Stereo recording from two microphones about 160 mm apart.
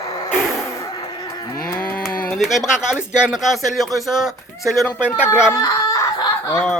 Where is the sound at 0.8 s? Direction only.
20° left (ahead or behind).